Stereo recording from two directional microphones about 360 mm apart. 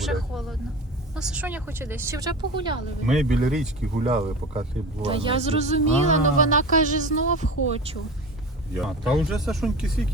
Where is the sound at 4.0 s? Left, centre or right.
Centre.